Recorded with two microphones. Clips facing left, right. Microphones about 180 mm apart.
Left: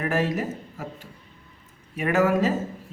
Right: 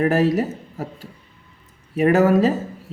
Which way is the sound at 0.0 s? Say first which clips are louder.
Right 7 dB; 35° right (ahead or behind).